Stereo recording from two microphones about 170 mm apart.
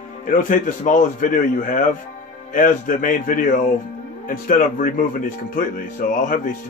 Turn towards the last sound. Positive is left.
turn(degrees=50)  # may be behind; listen again after turning